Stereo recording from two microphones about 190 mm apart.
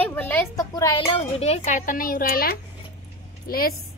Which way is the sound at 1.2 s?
35° left (ahead or behind).